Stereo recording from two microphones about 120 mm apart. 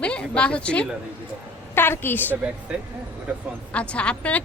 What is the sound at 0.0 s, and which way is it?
A woman's voice, 10° left (ahead or behind).